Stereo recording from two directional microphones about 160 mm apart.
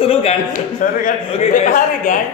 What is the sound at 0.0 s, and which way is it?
Speech, 40° left (ahead or behind).